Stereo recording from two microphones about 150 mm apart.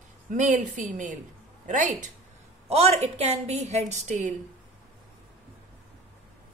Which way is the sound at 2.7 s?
45° right (ahead or behind).